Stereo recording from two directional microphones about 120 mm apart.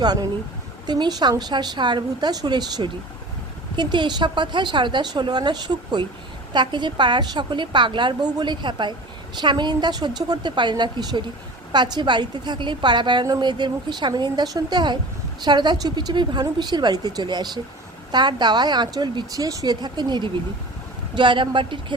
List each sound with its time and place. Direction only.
0.0 s a woman's voice: 35° right (ahead or behind)